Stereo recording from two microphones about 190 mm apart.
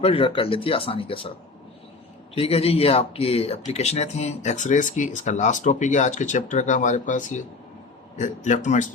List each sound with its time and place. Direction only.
0.0 s speech: 30° left (ahead or behind)
2.3 s speech: 30° left (ahead or behind)